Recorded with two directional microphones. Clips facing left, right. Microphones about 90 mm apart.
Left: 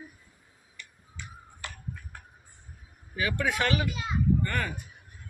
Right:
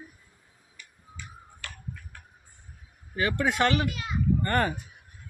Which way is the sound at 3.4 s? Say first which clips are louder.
Right 4 dB; 25° right (ahead or behind).